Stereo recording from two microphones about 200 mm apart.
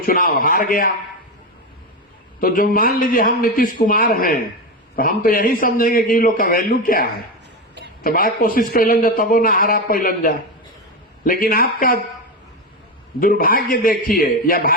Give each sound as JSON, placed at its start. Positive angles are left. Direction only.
{"t": 0.0, "sound": "a man's voice", "side_deg": 45}
{"t": 2.4, "sound": "a man's voice", "side_deg": 45}
{"t": 13.1, "sound": "a man's voice", "side_deg": 45}